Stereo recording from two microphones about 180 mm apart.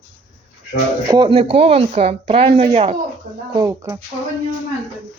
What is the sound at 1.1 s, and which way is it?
A woman's voice, 25° right (ahead or behind).